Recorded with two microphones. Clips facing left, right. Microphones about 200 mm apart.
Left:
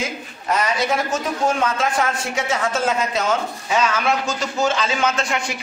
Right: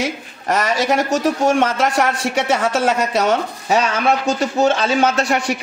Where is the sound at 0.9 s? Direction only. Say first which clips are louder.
Right 5 dB; 75° right (ahead or behind).